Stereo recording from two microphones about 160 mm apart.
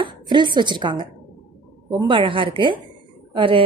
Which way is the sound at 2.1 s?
30° right (ahead or behind).